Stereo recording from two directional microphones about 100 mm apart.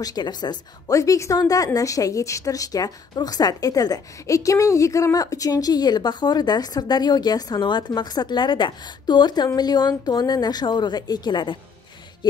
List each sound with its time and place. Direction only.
0.0 s a woman's voice: 45° left (ahead or behind)